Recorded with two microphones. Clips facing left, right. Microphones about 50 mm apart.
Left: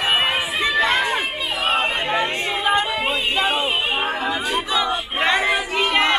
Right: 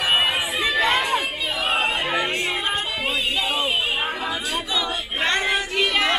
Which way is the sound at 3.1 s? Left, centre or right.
Left.